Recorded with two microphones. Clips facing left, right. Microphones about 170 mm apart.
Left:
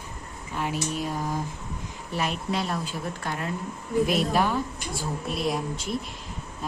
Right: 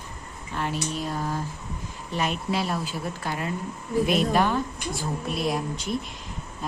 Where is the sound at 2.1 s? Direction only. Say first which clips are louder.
Right 1 dB; centre (ahead or behind).